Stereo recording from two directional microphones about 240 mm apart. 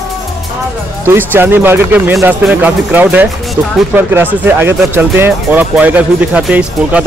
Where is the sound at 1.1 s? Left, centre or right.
Centre.